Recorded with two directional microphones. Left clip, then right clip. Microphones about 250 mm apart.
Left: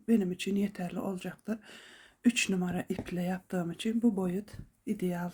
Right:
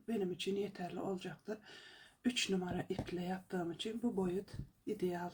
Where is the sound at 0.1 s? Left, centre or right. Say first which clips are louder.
Left 7 dB; left.